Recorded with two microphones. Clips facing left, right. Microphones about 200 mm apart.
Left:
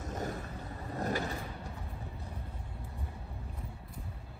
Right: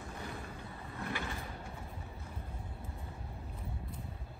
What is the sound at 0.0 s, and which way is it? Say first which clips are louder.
Vehicle: left 6 dB; 45° left (ahead or behind).